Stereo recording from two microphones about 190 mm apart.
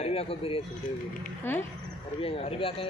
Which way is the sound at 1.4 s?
10° left (ahead or behind).